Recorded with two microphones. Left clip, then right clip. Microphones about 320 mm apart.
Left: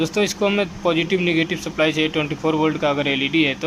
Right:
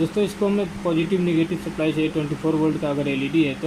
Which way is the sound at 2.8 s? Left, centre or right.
Left.